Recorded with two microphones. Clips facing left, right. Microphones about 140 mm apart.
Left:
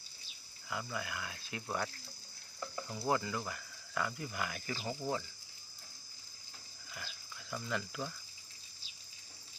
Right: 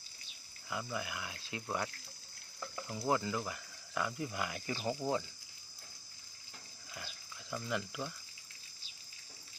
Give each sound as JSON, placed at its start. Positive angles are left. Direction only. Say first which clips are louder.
{"t": 0.7, "sound": "speech", "louder": "right 1 dB", "side_deg": -20}
{"t": 2.8, "sound": "speech", "louder": "right 1 dB", "side_deg": 0}
{"t": 3.1, "sound": "speech", "louder": "right 1 dB", "side_deg": -20}
{"t": 7.5, "sound": "speech", "louder": "right 1 dB", "side_deg": -15}